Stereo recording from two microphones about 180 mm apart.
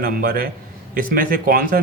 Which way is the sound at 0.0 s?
55° right (ahead or behind).